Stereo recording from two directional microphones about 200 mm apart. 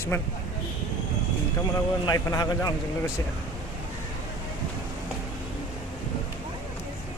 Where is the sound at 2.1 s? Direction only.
20° left (ahead or behind).